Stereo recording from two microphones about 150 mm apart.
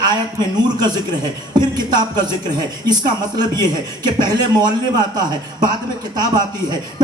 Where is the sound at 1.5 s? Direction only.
30° right (ahead or behind).